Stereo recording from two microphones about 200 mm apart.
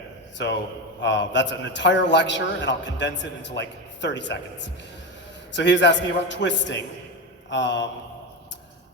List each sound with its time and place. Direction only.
1.0 s a man's voice: 65° left (ahead or behind)